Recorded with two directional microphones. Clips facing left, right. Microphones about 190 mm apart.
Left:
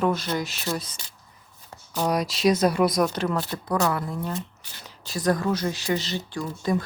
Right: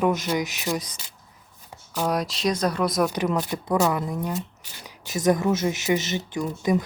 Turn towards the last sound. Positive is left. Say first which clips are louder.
# right 3 dB
turn(degrees=-15)  # may be behind; listen again after turning